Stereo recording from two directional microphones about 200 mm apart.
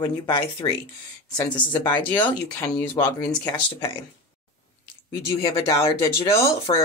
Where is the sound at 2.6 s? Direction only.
10° left (ahead or behind).